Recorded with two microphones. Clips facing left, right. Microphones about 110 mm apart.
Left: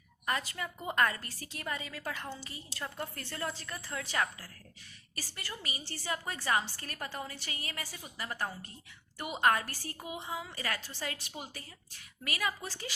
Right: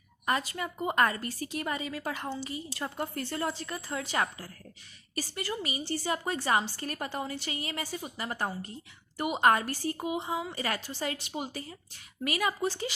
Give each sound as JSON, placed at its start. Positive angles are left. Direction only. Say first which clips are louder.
{"t": 0.3, "sound": "a woman's voice", "louder": "right 5 dB", "side_deg": -25}